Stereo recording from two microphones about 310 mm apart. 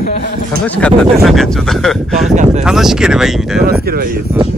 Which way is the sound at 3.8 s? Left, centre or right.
Right.